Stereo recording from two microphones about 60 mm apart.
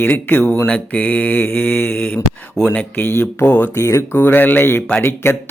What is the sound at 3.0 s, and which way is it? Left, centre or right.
Speech, left.